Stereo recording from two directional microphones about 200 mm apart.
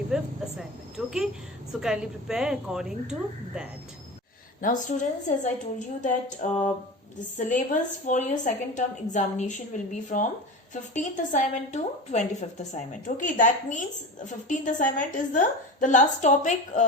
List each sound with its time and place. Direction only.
0.1 s a woman's voice: centre (ahead or behind)
4.6 s a woman's voice: 40° left (ahead or behind)
10.9 s a woman's voice: 40° left (ahead or behind)